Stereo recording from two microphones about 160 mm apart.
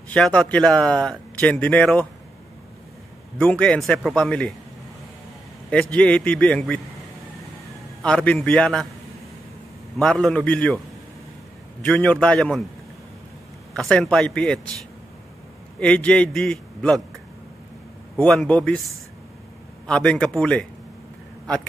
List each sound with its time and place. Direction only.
0.1 s speech: 5° left (ahead or behind)
3.3 s a man's voice: 5° left (ahead or behind)
5.7 s speech: 5° left (ahead or behind)
8.0 s a man's voice: 5° left (ahead or behind)
9.9 s speech: 5° left (ahead or behind)
11.8 s speech: 5° left (ahead or behind)
13.7 s speech: 5° left (ahead or behind)
15.8 s a man's voice: 5° left (ahead or behind)
18.1 s a man's voice: 5° left (ahead or behind)
19.9 s a man's voice: 5° left (ahead or behind)